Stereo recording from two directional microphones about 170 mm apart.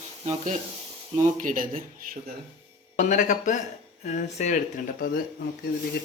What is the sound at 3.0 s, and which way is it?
Speech, 45° left (ahead or behind).